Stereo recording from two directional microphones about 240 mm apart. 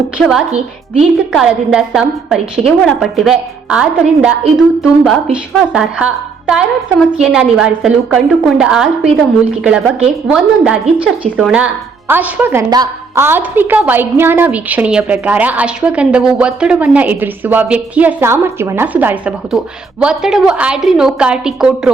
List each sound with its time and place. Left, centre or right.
0.2 s a woman's voice: centre